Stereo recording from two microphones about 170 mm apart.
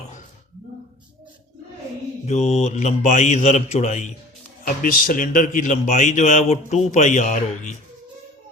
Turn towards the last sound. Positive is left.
turn(degrees=45)  # may be behind; listen again after turning